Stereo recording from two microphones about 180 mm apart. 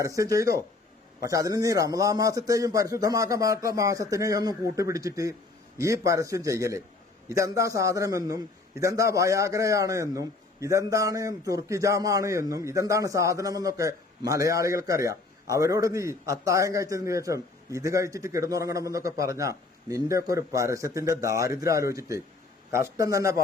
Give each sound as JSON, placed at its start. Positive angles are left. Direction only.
{"t": 0.0, "sound": "a man's voice", "side_deg": -20}